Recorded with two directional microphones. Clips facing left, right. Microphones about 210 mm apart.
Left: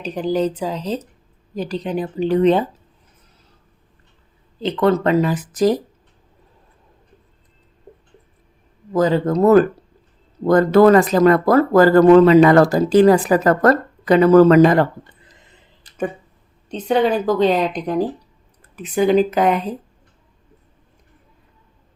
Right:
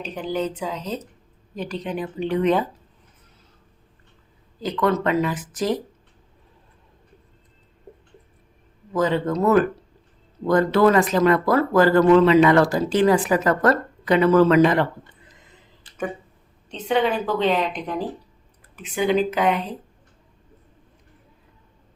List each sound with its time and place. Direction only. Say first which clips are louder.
0.0 s speech: left 6 dB; 35° left (ahead or behind)
4.6 s speech: left 5 dB; 30° left (ahead or behind)
8.9 s speech: left 5 dB; 40° left (ahead or behind)
16.6 s speech: left 4 dB; 40° left (ahead or behind)